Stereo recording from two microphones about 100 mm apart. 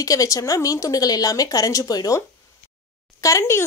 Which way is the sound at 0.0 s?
35° left (ahead or behind).